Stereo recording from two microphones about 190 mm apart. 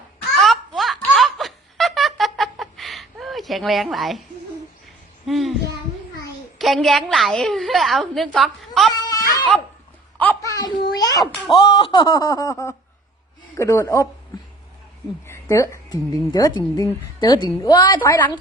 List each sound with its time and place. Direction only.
0.3 s a sound: centre (ahead or behind)
1.1 s laughter: centre (ahead or behind)
5.2 s a woman's voice: centre (ahead or behind)
6.6 s a woman's voice: centre (ahead or behind)
8.9 s a sound: 20° left (ahead or behind)
11.5 s a woman's voice: 25° left (ahead or behind)
15.3 s a woman's voice: 15° left (ahead or behind)
18.0 s speech: 10° left (ahead or behind)